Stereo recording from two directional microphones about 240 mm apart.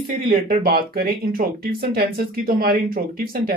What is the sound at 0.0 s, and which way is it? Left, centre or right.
Speech, right.